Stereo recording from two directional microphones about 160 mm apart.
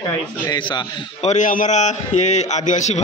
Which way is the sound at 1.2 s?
55° left (ahead or behind).